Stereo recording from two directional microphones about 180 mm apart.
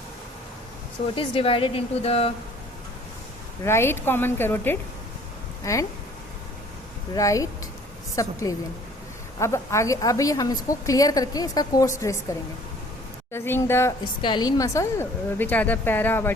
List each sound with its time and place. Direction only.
1.1 s speech: 30° left (ahead or behind)
3.6 s a woman's voice: 15° left (ahead or behind)
7.1 s a woman's voice: 20° left (ahead or behind)
14.0 s a woman's voice: 25° left (ahead or behind); by 16.3 s 10° left (ahead or behind)